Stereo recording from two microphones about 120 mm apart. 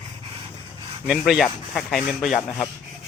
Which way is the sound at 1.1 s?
5° right (ahead or behind).